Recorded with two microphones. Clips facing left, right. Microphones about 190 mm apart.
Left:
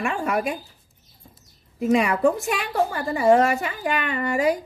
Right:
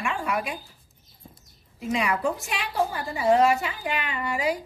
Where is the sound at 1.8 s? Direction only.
50° left (ahead or behind).